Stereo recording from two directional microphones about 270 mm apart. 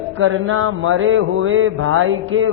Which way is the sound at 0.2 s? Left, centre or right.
Right.